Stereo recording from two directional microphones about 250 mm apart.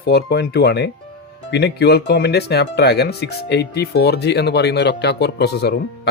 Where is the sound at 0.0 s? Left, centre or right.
Left.